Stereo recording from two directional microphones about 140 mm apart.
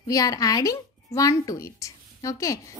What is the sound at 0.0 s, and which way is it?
Speech, 25° left (ahead or behind).